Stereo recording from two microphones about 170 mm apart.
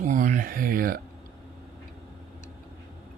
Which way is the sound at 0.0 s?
50° right (ahead or behind).